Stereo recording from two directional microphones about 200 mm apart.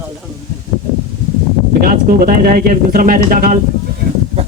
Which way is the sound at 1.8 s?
45° right (ahead or behind).